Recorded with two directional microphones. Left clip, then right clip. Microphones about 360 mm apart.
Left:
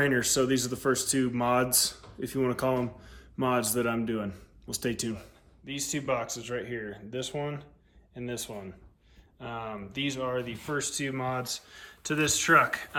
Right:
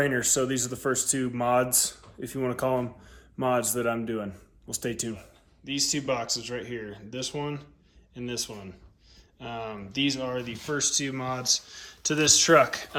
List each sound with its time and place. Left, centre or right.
0.0 s speech: centre